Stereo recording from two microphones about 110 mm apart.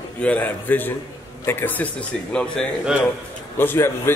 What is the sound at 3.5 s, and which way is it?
Speech, 20° left (ahead or behind).